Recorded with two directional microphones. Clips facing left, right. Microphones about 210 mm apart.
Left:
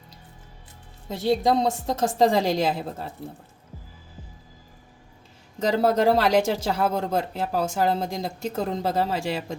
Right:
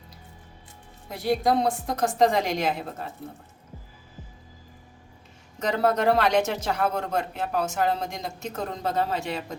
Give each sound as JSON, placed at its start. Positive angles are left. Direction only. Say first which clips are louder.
{"t": 1.0, "sound": "a woman's voice", "louder": "left 2 dB", "side_deg": 25}
{"t": 5.5, "sound": "a woman's voice", "louder": "left 3 dB", "side_deg": 30}